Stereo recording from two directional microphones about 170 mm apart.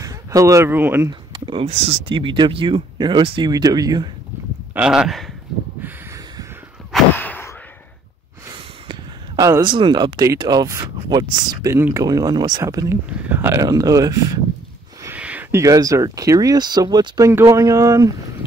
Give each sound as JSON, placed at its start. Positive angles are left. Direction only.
{"t": 0.0, "sound": "speech", "side_deg": -20}
{"t": 1.3, "sound": "speech", "side_deg": -30}
{"t": 4.7, "sound": "speech", "side_deg": -5}
{"t": 7.2, "sound": "a sound", "side_deg": 10}
{"t": 8.5, "sound": "a sound", "side_deg": -25}
{"t": 9.5, "sound": "speech", "side_deg": -25}
{"t": 15.0, "sound": "speech", "side_deg": -10}